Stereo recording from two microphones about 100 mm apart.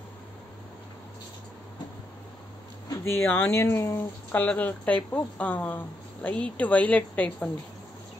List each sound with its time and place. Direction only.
3.1 s speech: 20° left (ahead or behind)